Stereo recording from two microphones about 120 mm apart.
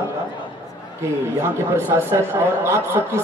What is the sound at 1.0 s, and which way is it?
Speech, 20° right (ahead or behind).